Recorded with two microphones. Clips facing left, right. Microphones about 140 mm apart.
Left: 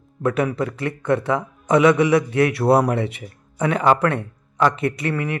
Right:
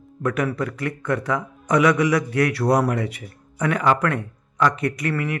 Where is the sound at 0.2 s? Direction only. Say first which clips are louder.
Left 2 dB; 25° left (ahead or behind).